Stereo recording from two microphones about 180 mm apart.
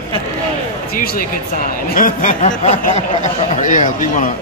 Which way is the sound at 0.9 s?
55° left (ahead or behind).